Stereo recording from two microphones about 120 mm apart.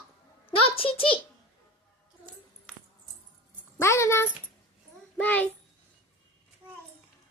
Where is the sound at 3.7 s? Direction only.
20° left (ahead or behind).